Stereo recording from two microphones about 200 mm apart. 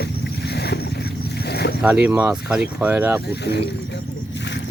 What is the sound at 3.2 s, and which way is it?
Speech, 55° left (ahead or behind).